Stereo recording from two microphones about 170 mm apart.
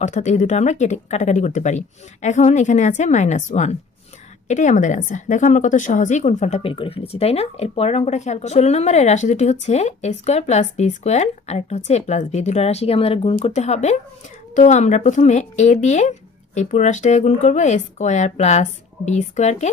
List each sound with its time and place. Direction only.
0.0 s a woman's voice: 45° left (ahead or behind)